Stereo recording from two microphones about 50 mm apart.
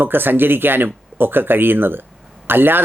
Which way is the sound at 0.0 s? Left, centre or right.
Right.